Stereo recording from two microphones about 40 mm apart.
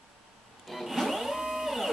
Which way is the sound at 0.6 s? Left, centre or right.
Centre.